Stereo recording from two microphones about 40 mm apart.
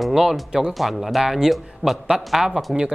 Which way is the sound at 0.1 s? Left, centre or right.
Centre.